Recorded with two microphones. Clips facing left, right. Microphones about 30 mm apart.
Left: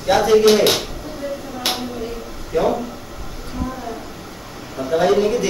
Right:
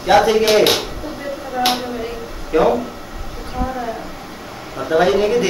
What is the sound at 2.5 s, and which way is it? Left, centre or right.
Speech, right.